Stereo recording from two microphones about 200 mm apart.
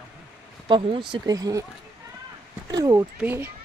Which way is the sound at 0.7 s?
25° right (ahead or behind).